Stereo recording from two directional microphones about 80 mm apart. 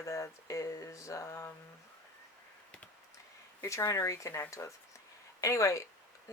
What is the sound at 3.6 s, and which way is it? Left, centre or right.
Speech, left.